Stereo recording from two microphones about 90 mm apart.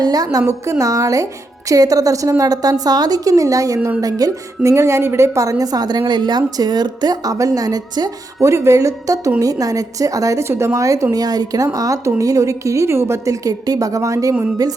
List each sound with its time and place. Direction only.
0.0 s a woman's voice: 45° right (ahead or behind)
8.4 s a woman's voice: 30° right (ahead or behind)